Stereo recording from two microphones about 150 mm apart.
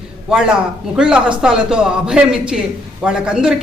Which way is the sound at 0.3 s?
5° right (ahead or behind).